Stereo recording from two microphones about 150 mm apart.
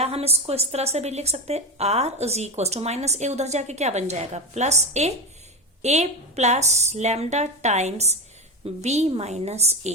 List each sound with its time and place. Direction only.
0.0 s a woman's voice: 45° right (ahead or behind)